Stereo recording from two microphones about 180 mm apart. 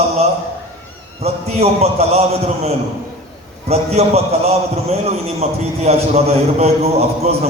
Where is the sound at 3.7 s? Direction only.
35° right (ahead or behind).